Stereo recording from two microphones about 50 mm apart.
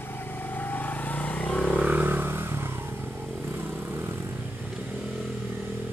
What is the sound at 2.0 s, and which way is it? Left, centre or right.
Vehicle, right.